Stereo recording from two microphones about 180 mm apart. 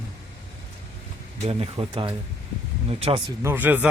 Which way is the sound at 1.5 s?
30° right (ahead or behind).